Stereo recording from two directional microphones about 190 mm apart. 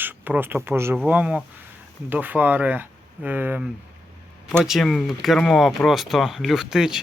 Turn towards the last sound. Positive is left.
turn(degrees=-5)  # may be behind; listen again after turning